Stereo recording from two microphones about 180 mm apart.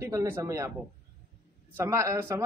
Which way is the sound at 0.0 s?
15° right (ahead or behind).